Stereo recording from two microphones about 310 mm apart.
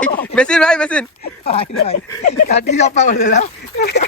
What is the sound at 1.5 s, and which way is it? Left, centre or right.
Speech, centre.